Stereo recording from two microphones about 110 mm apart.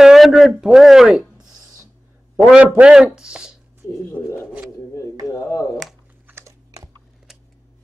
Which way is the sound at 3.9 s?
25° left (ahead or behind).